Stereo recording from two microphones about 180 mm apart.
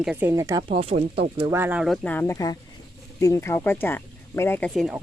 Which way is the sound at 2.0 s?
10° left (ahead or behind).